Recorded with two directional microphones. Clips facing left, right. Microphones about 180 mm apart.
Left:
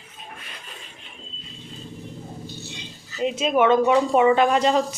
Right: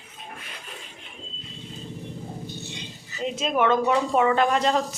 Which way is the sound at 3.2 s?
5° left (ahead or behind).